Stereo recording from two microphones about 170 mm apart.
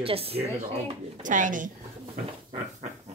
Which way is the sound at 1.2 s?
50° right (ahead or behind).